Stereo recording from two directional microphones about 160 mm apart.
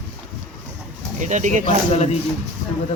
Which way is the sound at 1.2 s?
50° right (ahead or behind).